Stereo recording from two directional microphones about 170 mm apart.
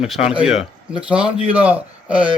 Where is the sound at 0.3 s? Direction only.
5° right (ahead or behind).